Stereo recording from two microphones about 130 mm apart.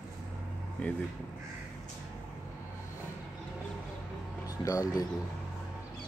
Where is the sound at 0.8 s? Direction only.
10° left (ahead or behind).